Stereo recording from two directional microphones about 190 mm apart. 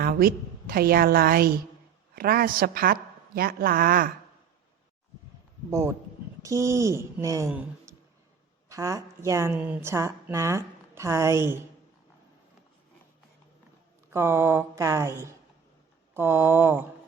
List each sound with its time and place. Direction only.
0.0 s a woman's voice: 50° right (ahead or behind)
5.7 s a woman's voice: 15° right (ahead or behind)
14.1 s a woman's voice: 15° right (ahead or behind)